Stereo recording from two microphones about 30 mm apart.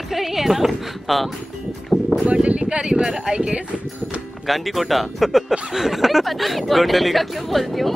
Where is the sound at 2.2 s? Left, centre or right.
Right.